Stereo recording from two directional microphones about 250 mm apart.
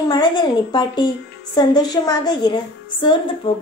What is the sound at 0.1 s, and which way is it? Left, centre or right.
A woman's voice, centre.